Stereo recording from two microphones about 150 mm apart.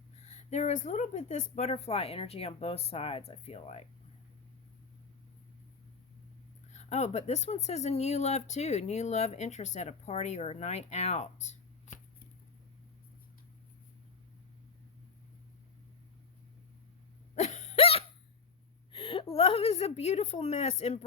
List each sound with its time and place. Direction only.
0.3 s speech: 50° left (ahead or behind)
6.7 s speech: 50° left (ahead or behind)
17.3 s hiccup: 50° left (ahead or behind)
18.9 s a woman's voice: 35° left (ahead or behind)